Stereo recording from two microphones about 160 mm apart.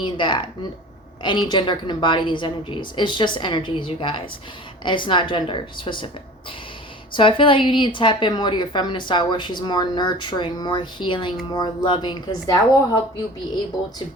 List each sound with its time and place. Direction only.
0.0 s a woman's voice: 30° left (ahead or behind)
7.1 s a woman's voice: 30° left (ahead or behind)